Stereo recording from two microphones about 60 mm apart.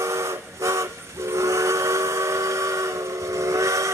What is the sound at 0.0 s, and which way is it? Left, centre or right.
Steam whistle, right.